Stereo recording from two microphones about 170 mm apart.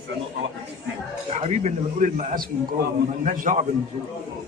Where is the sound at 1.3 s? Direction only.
40° right (ahead or behind).